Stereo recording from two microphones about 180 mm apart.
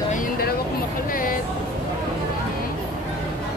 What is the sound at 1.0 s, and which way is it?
Music, 50° left (ahead or behind).